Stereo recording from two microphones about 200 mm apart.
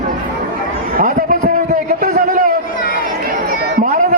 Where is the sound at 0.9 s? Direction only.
40° right (ahead or behind).